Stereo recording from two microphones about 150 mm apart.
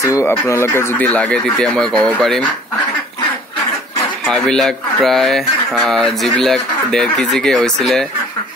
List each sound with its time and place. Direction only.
0.0 s speech: 20° left (ahead or behind)
4.3 s speech: 5° left (ahead or behind)